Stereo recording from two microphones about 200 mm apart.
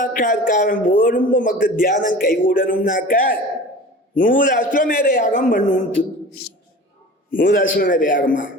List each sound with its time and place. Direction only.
0.0 s a man's voice: 45° left (ahead or behind)
7.3 s a man's voice: 45° left (ahead or behind)